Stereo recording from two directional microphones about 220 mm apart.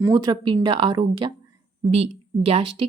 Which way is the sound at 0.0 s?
15° right (ahead or behind).